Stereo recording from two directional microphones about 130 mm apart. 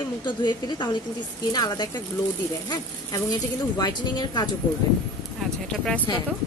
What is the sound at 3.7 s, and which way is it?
Speech, 30° left (ahead or behind).